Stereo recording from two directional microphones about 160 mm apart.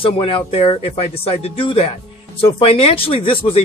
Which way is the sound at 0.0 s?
35° left (ahead or behind).